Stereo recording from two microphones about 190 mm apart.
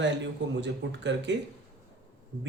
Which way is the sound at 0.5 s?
70° right (ahead or behind).